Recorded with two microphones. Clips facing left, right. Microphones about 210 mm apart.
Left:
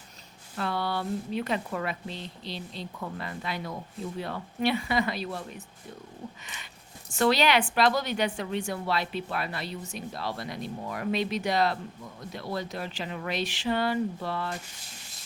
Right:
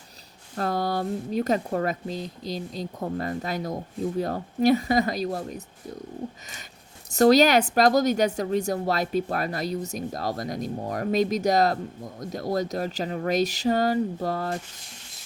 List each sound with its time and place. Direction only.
0.5 s a woman's voice: 40° right (ahead or behind)
7.1 s a woman's voice: 40° right (ahead or behind)